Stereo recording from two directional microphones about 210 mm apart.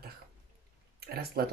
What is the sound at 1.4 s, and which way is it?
Speech, 45° right (ahead or behind).